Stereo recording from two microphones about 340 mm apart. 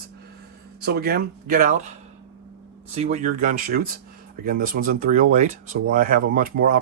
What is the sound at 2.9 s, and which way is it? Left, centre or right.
Speech, centre.